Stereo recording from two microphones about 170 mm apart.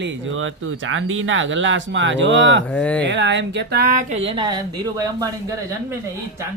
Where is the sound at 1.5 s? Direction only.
90° right.